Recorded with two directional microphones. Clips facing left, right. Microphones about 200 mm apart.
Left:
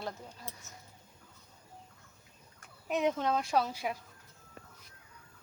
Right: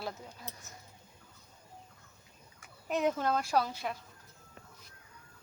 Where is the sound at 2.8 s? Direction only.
Centre (ahead or behind).